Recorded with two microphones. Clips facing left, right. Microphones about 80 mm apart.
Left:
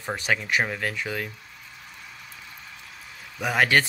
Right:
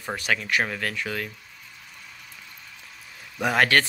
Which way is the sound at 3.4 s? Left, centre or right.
Centre.